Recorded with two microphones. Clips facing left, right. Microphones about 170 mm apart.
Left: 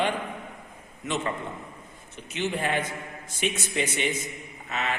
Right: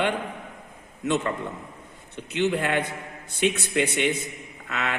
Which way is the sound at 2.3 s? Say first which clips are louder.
Right 4 dB; 65° right (ahead or behind).